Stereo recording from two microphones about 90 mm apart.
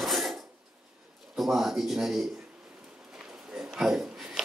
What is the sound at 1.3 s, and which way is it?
Speech, 5° right (ahead or behind).